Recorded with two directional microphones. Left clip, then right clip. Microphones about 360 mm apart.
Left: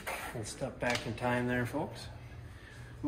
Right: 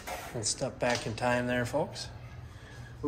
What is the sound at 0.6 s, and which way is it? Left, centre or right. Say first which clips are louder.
Speech: right 3 dB; centre.